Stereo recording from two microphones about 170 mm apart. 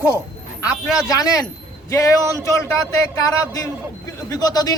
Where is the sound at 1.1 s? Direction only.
20° left (ahead or behind).